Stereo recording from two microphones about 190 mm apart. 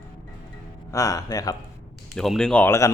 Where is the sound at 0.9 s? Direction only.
15° left (ahead or behind).